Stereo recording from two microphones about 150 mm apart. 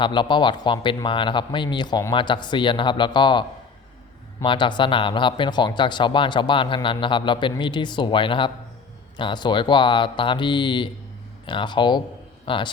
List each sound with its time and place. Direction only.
0.0 s speech: 30° left (ahead or behind)
4.4 s speech: 30° left (ahead or behind)